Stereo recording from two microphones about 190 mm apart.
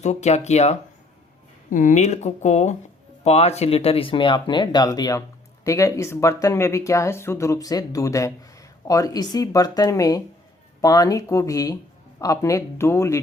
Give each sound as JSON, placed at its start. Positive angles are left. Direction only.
{"t": 0.0, "sound": "speech", "side_deg": 35}